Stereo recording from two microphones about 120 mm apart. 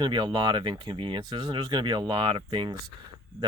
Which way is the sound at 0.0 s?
40° right (ahead or behind).